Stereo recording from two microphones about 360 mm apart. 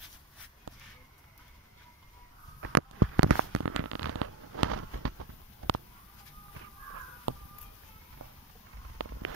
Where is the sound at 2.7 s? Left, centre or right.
Right.